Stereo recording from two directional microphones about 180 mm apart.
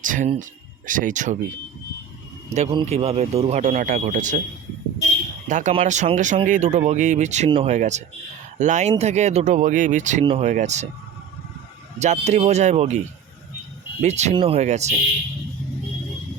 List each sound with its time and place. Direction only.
0.0 s speech: 45° right (ahead or behind)
2.5 s a man's voice: 40° right (ahead or behind)
5.5 s speech: 45° right (ahead or behind)
11.9 s speech: 40° right (ahead or behind)
14.0 s speech: 40° right (ahead or behind)